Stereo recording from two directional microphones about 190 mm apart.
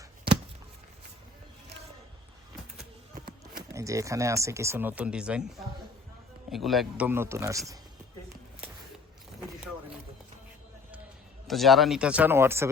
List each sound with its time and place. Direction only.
3.2 s speech: 15° right (ahead or behind)
6.5 s speech: centre (ahead or behind); by 7.6 s 15° right (ahead or behind)
11.4 s speech: centre (ahead or behind)